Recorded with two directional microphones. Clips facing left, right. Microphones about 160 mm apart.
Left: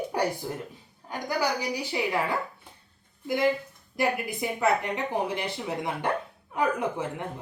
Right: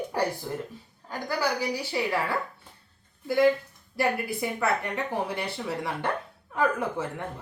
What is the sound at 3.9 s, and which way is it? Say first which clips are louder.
Speech: even; 20° left (ahead or behind).